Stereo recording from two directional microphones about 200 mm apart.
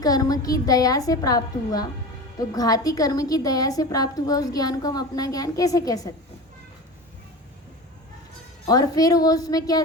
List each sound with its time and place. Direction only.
0.0 s a woman's voice: 20° left (ahead or behind)
8.6 s a woman's voice: 20° left (ahead or behind)